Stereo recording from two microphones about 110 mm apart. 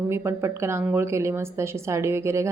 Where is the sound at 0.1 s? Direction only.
25° right (ahead or behind).